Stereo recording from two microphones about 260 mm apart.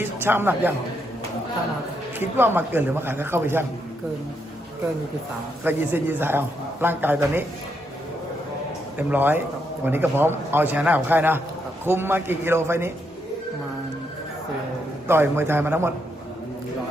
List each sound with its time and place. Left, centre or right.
0.0 s a man's voice: centre
2.1 s a man's voice: centre
5.6 s a man's voice: centre
9.0 s a man's voice: centre
15.0 s a man's voice: centre